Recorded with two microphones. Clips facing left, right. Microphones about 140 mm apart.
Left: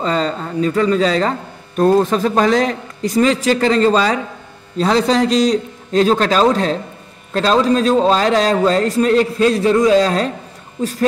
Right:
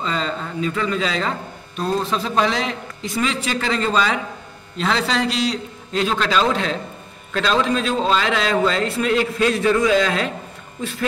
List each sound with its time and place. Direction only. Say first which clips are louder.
0.0 s a man's voice: left 6 dB; 40° left (ahead or behind)